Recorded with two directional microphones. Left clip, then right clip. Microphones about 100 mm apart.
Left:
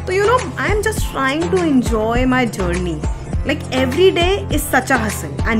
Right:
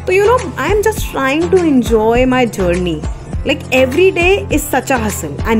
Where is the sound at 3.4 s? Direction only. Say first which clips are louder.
Right 7 dB; 30° right (ahead or behind).